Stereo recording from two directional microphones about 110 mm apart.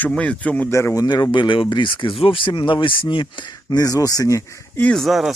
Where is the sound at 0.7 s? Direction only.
25° left (ahead or behind); by 3.2 s 50° left (ahead or behind).